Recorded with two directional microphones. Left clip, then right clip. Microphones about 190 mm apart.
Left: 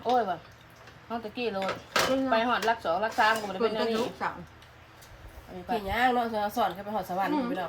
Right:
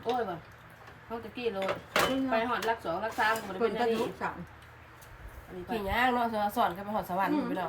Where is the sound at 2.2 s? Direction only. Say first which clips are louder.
Left 4 dB; 30° left (ahead or behind).